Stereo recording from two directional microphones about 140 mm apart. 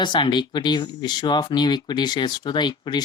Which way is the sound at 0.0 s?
35° left (ahead or behind).